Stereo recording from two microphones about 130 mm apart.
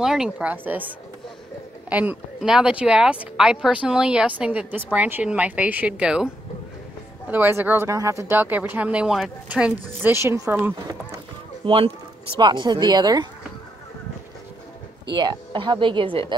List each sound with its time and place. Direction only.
0.0 s speech: 5° right (ahead or behind)
1.9 s speech: 10° right (ahead or behind)
10.1 s a woman's voice: 25° right (ahead or behind)
11.6 s a woman's voice: 45° right (ahead or behind)
15.0 s a woman's voice: 35° right (ahead or behind)